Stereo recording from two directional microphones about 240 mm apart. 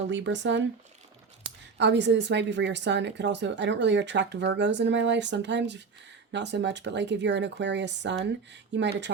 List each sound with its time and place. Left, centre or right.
0.1 s a woman's voice: right
1.8 s a woman's voice: right